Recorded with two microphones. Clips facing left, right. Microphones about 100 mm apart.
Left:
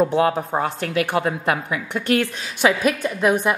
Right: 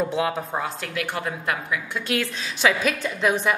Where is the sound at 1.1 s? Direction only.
60° left (ahead or behind).